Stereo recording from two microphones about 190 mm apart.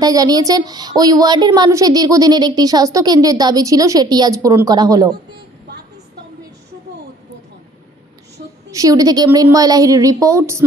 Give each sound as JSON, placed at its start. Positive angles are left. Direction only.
{"t": 0.0, "sound": "a woman's voice", "side_deg": -20}
{"t": 8.7, "sound": "a woman's voice", "side_deg": -20}